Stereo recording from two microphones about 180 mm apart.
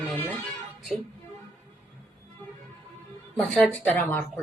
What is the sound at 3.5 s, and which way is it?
Speech, 5° left (ahead or behind).